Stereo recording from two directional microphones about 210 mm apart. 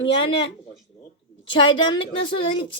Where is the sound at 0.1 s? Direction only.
25° left (ahead or behind).